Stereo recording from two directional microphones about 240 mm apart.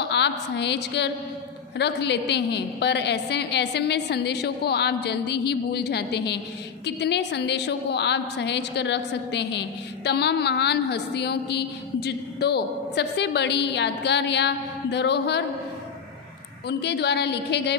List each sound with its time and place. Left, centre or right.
0.1 s a woman's voice: left
16.6 s a woman's voice: left